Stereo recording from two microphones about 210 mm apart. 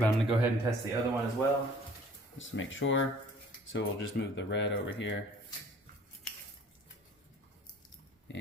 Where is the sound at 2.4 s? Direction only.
65° left (ahead or behind).